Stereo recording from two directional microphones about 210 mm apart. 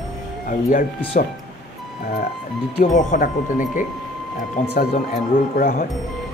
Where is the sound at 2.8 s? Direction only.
35° left (ahead or behind).